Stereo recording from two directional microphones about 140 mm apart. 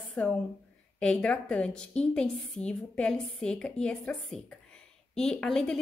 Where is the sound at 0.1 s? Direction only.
5° left (ahead or behind).